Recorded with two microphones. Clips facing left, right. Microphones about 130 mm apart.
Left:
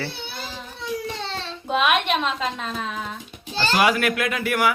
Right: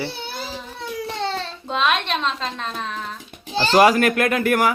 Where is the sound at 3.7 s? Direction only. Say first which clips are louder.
Right 6 dB; 40° right (ahead or behind).